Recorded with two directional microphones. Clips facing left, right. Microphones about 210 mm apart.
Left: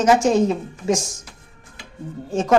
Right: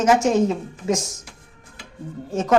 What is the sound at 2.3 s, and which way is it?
Speech, 30° left (ahead or behind).